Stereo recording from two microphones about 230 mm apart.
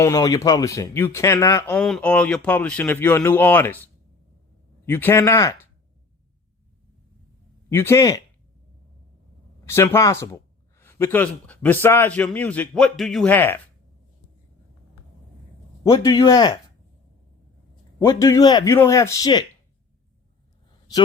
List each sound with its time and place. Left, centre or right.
0.0 s speech: centre
4.9 s speech: centre
7.7 s speech: centre
9.6 s speech: centre
15.8 s speech: centre
18.0 s speech: centre
20.7 s a sound: centre